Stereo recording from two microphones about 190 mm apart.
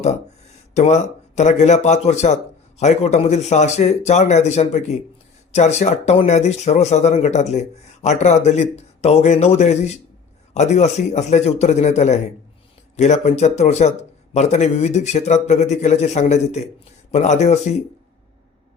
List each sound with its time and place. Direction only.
0.7 s speech: 35° left (ahead or behind)